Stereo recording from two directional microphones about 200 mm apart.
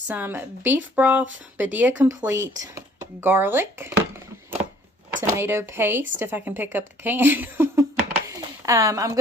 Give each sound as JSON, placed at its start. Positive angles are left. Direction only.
{"t": 0.1, "sound": "speech", "side_deg": -10}
{"t": 5.4, "sound": "speech", "side_deg": -10}
{"t": 8.3, "sound": "a sound", "side_deg": -15}